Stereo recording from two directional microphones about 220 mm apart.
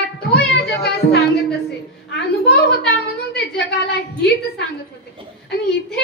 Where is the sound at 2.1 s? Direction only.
50° left (ahead or behind).